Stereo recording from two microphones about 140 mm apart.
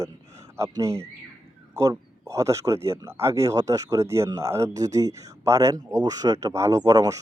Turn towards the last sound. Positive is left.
turn(degrees=-25)  # may be behind; listen again after turning